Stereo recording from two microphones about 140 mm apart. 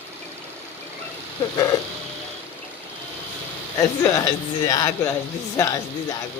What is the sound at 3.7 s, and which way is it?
Speech, 25° left (ahead or behind).